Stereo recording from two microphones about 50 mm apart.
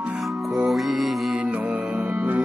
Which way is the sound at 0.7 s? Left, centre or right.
Centre.